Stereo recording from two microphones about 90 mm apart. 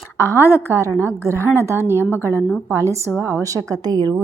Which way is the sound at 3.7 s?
50° right (ahead or behind).